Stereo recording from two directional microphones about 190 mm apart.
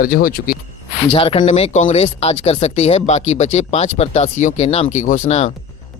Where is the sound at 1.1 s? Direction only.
30° left (ahead or behind).